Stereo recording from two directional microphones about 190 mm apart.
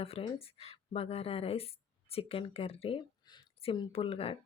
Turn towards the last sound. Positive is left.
turn(degrees=30)  # may be behind; listen again after turning